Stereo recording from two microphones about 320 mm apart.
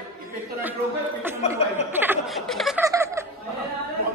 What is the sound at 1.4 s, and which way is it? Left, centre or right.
Chuckle, centre.